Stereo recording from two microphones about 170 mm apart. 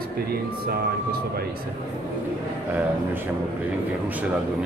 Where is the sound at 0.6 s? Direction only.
65° right (ahead or behind).